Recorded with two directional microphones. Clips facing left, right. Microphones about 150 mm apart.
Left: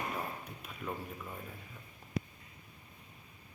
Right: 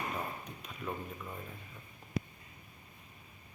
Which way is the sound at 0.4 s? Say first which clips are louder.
Right 1 dB; 5° left (ahead or behind).